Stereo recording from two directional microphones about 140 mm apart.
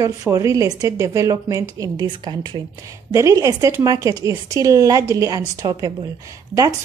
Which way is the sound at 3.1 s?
20° right (ahead or behind).